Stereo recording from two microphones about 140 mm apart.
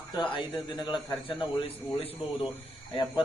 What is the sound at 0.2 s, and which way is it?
Speech, 35° left (ahead or behind).